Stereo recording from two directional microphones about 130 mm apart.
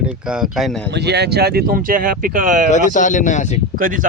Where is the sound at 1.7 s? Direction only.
90° right.